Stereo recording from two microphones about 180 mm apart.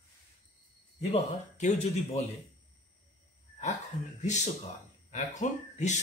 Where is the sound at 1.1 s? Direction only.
40° left (ahead or behind).